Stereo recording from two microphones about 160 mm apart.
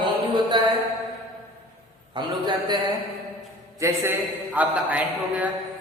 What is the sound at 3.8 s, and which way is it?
A man's voice, 10° right (ahead or behind).